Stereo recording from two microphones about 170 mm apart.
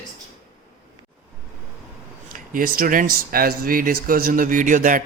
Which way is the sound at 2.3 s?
55° right (ahead or behind).